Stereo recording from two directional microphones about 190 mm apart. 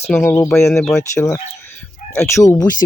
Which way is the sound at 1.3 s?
10° left (ahead or behind).